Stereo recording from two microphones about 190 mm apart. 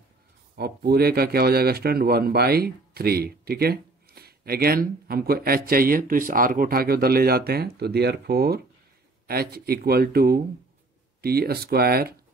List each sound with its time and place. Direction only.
0.6 s speech: 55° right (ahead or behind)